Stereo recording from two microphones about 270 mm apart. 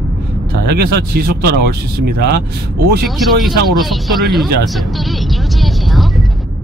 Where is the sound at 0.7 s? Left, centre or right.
Right.